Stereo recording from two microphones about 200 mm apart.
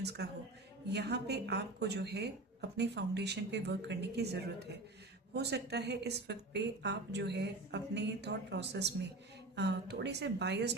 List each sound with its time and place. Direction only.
0.0 s a man's voice: 55° right (ahead or behind)